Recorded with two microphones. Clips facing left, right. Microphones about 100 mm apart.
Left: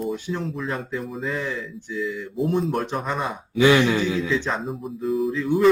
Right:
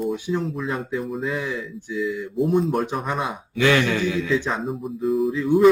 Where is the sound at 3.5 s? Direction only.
15° left (ahead or behind).